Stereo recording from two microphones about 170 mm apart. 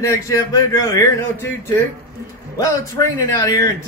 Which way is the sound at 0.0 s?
20° left (ahead or behind).